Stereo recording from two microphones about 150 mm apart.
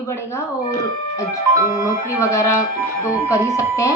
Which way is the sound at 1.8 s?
20° left (ahead or behind).